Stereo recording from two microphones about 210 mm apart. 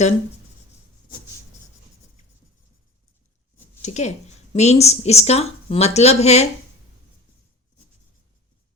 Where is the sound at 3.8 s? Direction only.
35° left (ahead or behind).